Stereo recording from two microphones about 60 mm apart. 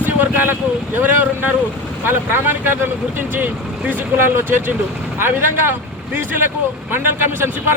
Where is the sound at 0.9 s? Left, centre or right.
Right.